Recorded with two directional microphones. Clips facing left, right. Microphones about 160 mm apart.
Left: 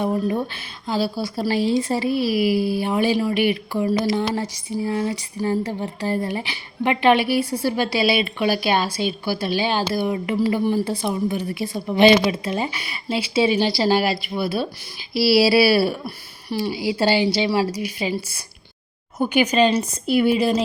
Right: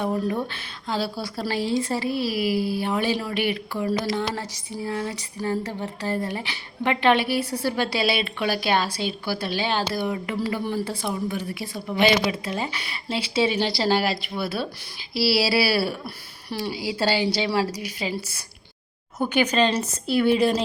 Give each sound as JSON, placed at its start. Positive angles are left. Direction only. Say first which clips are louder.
{"t": 0.0, "sound": "a woman's voice", "louder": "left 3 dB", "side_deg": 10}